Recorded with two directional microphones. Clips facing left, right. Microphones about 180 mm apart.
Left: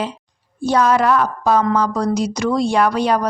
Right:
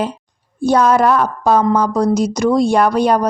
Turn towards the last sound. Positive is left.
turn(degrees=-45)  # may be behind; listen again after turning